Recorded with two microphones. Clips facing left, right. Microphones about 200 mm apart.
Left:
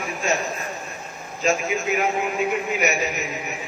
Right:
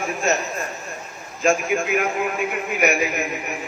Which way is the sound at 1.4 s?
55° right (ahead or behind).